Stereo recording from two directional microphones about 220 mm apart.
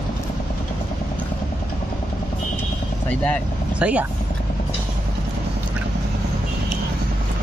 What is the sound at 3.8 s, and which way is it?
Speech, 5° right (ahead or behind).